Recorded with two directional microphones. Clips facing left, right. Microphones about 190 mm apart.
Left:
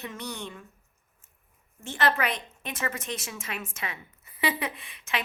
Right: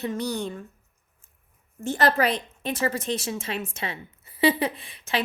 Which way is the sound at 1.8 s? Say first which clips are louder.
Right 5 dB; 40° right (ahead or behind).